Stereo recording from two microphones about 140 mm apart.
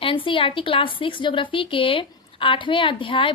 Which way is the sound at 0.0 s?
40° left (ahead or behind).